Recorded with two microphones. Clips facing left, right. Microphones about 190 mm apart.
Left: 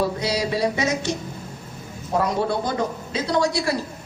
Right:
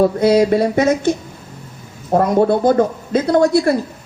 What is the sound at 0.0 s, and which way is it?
A woman's voice, 50° right (ahead or behind).